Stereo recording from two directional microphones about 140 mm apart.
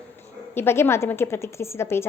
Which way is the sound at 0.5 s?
15° left (ahead or behind).